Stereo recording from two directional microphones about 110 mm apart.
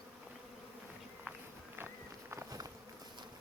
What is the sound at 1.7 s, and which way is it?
Walk, 20° right (ahead or behind).